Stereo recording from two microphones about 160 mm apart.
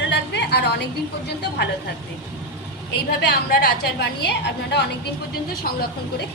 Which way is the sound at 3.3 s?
75° left (ahead or behind).